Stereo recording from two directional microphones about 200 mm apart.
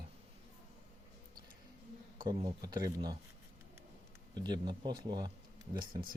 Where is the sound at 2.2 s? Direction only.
20° right (ahead or behind).